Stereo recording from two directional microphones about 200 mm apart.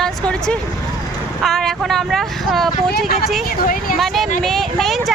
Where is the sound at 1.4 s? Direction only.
Centre (ahead or behind).